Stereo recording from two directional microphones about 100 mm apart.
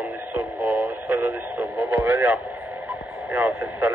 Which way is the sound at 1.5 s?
15° right (ahead or behind).